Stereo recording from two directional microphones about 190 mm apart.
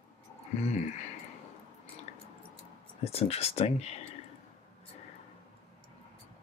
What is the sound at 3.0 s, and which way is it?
Speech, 35° left (ahead or behind).